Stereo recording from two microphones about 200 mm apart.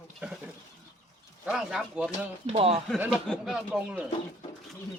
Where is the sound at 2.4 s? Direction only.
30° right (ahead or behind).